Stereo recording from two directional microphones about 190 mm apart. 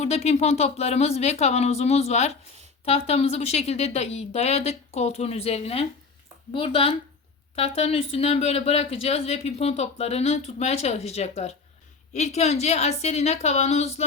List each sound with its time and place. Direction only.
0.0 s speech: 35° left (ahead or behind)